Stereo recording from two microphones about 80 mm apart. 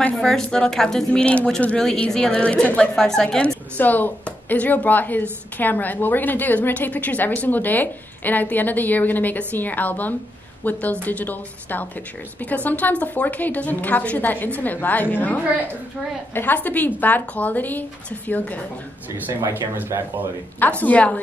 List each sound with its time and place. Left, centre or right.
0.1 s a woman's voice: centre
19.7 s speech: right
20.8 s speech: centre